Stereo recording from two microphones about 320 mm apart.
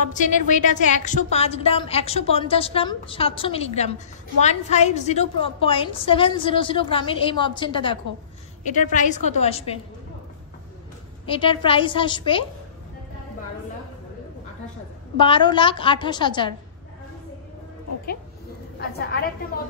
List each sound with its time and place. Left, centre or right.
0.1 s a woman's voice: left
11.2 s a woman's voice: centre
15.1 s a woman's voice: centre
18.8 s a woman's voice: left